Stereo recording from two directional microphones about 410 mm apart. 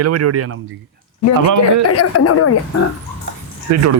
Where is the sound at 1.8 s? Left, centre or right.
Left.